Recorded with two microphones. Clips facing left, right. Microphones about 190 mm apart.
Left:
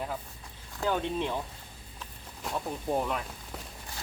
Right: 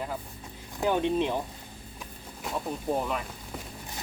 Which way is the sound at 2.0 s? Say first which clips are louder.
Right 1 dB; 5° right (ahead or behind).